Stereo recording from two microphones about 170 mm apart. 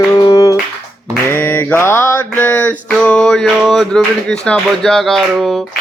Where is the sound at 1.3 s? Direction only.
10° left (ahead or behind).